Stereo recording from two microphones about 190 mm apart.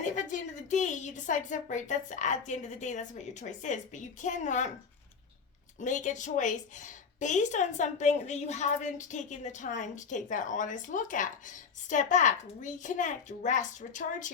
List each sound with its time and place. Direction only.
0.0 s a woman's voice: 40° left (ahead or behind)
5.8 s a woman's voice: 40° left (ahead or behind)